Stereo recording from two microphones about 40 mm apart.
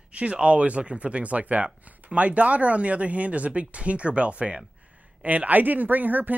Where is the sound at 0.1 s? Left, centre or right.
Right.